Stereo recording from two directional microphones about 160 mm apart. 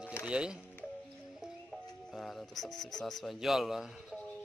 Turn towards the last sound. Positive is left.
turn(degrees=0)  # may be behind; listen again after turning